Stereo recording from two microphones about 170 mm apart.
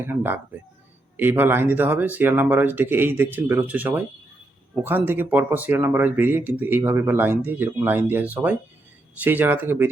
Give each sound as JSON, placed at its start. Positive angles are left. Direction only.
{"t": 0.0, "sound": "speech", "side_deg": -10}